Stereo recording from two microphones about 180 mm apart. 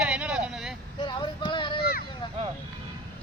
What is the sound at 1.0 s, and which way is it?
Female singing, 25° left (ahead or behind).